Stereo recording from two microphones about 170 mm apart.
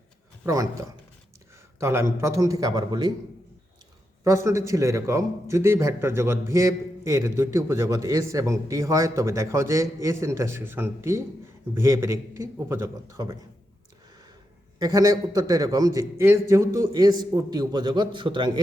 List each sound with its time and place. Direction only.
0.4 s a man's voice: 20° right (ahead or behind)
4.2 s a man's voice: 15° right (ahead or behind)
14.8 s a man's voice: 20° right (ahead or behind)